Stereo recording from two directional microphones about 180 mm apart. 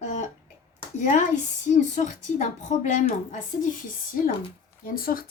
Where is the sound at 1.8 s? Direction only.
40° left (ahead or behind).